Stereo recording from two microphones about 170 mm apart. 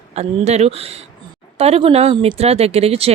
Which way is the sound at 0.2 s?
40° right (ahead or behind).